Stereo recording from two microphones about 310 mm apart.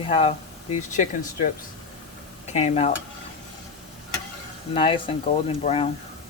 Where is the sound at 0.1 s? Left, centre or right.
Centre.